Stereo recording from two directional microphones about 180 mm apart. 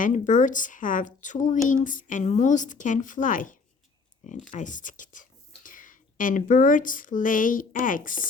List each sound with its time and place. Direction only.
0.0 s speech: 45° left (ahead or behind)